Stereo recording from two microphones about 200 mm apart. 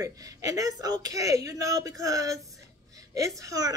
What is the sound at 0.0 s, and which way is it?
Speech, 15° right (ahead or behind).